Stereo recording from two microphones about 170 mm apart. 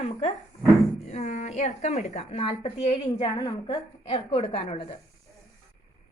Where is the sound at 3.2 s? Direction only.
25° left (ahead or behind).